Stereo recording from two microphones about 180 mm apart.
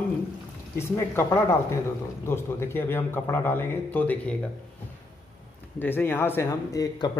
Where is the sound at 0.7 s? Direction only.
15° left (ahead or behind).